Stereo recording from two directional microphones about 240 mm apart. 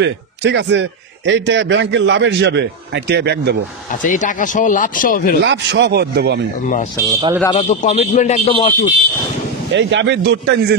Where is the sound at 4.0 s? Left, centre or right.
Left.